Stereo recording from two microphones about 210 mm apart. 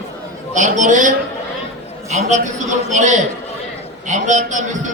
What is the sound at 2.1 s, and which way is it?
A man's voice, 30° right (ahead or behind).